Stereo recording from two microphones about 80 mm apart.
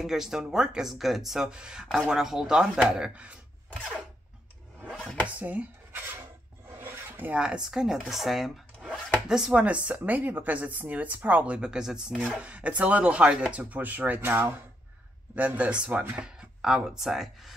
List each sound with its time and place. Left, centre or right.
0.0 s speech: centre
4.8 s chopping: centre
5.4 s speech: centre
6.7 s filing: right
7.3 s speech: centre
16.3 s speech: centre